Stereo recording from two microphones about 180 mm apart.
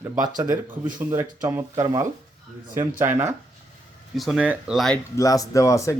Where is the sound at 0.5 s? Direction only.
50° right (ahead or behind).